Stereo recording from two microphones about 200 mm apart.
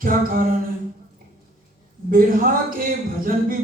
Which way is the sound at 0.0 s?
45° right (ahead or behind).